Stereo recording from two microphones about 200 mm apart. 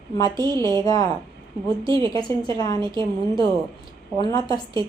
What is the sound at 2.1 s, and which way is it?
Speech, 20° left (ahead or behind).